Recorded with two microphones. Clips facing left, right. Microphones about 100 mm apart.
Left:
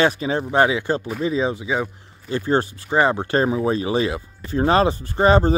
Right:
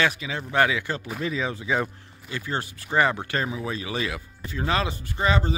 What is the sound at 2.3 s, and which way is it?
Speech, 35° left (ahead or behind).